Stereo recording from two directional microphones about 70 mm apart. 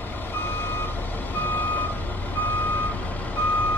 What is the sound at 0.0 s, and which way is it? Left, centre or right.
Reversing beeps, left.